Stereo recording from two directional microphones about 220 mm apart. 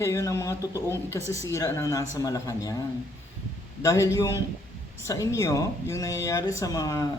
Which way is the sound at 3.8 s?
15° left (ahead or behind).